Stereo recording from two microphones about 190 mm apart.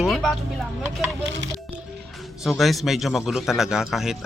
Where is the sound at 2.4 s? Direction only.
Centre (ahead or behind).